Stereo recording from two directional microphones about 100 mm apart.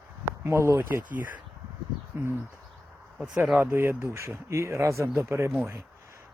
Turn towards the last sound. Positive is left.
turn(degrees=-25)  # may be behind; listen again after turning